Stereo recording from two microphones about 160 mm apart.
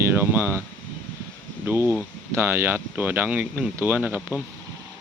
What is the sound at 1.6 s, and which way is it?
Speech, 15° right (ahead or behind).